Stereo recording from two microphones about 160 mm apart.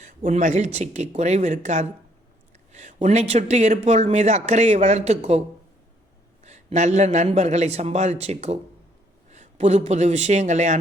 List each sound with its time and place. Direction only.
0.3 s speech: 50° right (ahead or behind)
6.4 s a man's voice: 45° right (ahead or behind)